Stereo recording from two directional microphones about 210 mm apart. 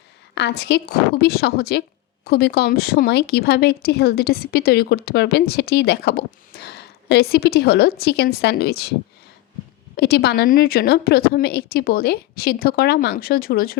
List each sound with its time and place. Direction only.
0.3 s speech: 55° left (ahead or behind)
10.0 s speech: 50° left (ahead or behind)